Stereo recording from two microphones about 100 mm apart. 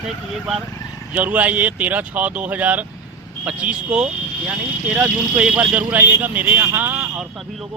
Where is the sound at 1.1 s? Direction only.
15° right (ahead or behind).